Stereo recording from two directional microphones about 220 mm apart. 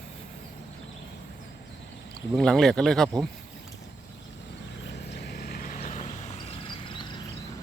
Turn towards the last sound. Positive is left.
turn(degrees=20)  # may be behind; listen again after turning